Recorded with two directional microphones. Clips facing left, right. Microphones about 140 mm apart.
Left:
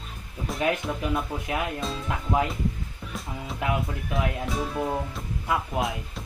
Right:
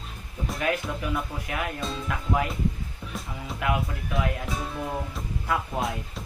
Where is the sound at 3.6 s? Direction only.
25° left (ahead or behind).